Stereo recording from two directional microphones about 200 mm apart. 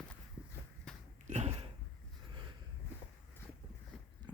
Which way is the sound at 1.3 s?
30° right (ahead or behind).